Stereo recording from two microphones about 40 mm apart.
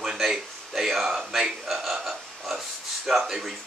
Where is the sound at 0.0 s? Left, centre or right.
Centre.